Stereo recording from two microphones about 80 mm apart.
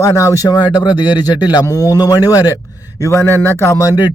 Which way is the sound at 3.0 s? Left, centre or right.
Left.